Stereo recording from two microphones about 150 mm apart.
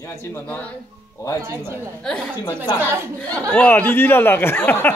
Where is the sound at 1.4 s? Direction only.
15° right (ahead or behind).